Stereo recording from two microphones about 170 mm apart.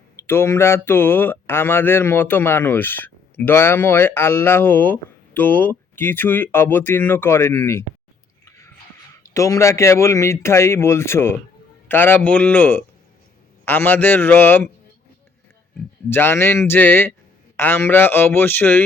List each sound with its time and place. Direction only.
0.2 s speech: 15° left (ahead or behind)
8.4 s chewing: 15° left (ahead or behind)
9.2 s speech: 20° left (ahead or behind)
16.0 s speech: 15° left (ahead or behind)